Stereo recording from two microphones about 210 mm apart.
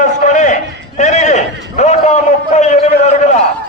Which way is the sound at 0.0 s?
35° left (ahead or behind).